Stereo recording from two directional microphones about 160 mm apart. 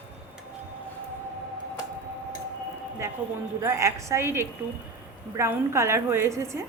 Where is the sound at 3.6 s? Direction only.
20° right (ahead or behind).